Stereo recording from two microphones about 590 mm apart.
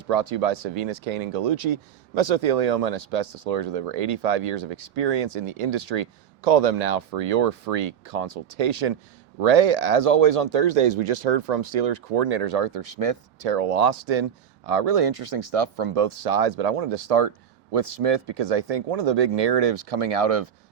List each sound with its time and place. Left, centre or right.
0.1 s speech: right